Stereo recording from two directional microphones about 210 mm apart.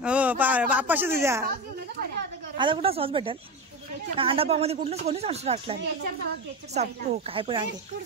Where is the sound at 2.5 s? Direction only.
25° right (ahead or behind).